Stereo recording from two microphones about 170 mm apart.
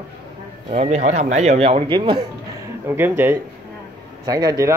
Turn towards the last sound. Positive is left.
turn(degrees=-20)  # may be behind; listen again after turning